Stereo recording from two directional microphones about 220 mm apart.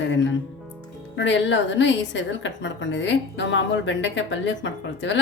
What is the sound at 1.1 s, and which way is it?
A woman's voice, 55° left (ahead or behind).